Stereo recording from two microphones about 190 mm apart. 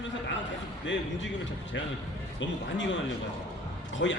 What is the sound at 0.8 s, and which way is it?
A man's voice, 70° left (ahead or behind).